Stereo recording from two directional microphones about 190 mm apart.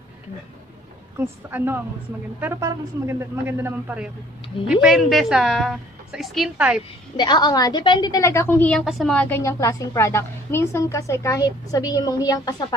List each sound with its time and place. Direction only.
1.1 s a woman's voice: 10° right (ahead or behind)
7.2 s a woman's voice: 20° left (ahead or behind)